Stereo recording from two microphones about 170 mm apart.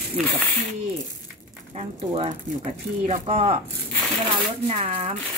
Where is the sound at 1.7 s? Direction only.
35° right (ahead or behind).